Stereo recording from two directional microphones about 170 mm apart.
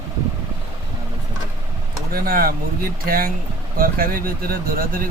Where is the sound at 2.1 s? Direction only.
60° right (ahead or behind).